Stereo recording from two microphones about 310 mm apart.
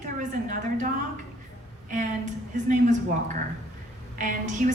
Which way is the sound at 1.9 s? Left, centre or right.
Right.